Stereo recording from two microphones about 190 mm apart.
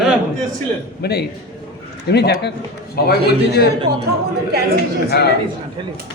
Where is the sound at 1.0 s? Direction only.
60° left (ahead or behind).